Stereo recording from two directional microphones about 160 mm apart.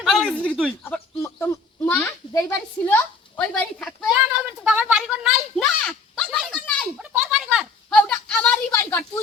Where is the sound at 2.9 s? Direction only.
10° left (ahead or behind).